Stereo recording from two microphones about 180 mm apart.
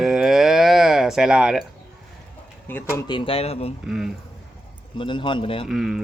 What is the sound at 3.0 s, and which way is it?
Speech, 25° left (ahead or behind).